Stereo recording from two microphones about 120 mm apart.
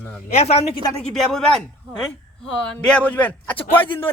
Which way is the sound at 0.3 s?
60° left (ahead or behind).